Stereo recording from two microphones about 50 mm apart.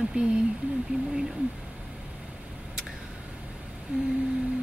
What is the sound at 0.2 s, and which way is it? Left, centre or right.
Speech, right.